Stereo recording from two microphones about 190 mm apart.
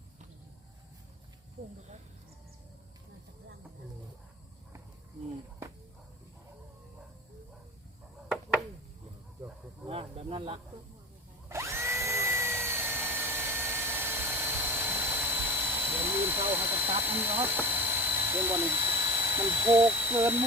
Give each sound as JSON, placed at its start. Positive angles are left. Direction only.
{"t": 9.8, "sound": "snake", "side_deg": -30}
{"t": 11.4, "sound": "drill", "side_deg": -15}
{"t": 16.5, "sound": "vehicle", "side_deg": -10}
{"t": 17.0, "sound": "a sound", "side_deg": -10}